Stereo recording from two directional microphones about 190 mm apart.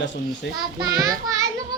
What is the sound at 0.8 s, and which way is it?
Child singing, 20° right (ahead or behind).